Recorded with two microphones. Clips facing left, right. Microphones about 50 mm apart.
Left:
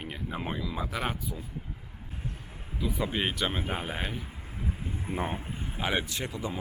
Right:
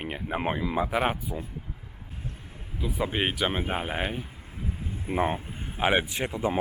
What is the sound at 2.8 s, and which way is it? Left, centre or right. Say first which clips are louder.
Speech: right 2 dB; centre.